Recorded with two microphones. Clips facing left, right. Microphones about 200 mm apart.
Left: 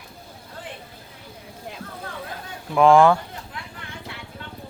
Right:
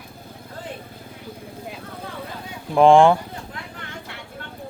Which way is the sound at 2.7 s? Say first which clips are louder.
Right 2 dB; 30° right (ahead or behind).